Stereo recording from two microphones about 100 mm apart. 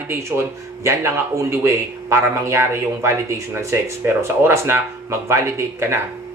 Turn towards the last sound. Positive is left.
turn(degrees=-25)  # may be behind; listen again after turning